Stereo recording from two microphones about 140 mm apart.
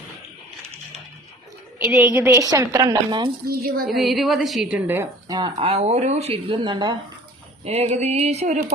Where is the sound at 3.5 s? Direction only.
90° right.